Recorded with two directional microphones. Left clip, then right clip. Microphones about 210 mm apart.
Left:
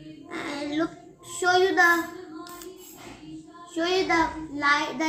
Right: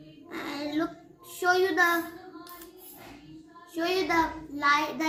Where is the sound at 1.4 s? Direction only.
5° right (ahead or behind).